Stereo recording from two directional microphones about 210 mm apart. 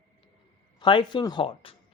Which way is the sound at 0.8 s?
20° left (ahead or behind).